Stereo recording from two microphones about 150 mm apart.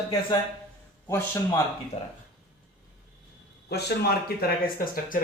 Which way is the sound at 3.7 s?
90° left.